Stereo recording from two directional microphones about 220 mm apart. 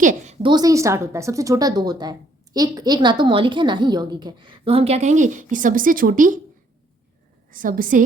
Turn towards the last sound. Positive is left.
turn(degrees=-40)  # may be behind; listen again after turning